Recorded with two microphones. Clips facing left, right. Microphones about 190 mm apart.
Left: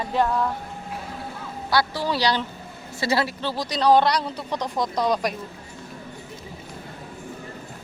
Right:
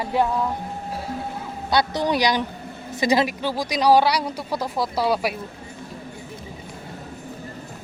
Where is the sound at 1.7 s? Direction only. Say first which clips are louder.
Right 2 dB; 20° right (ahead or behind).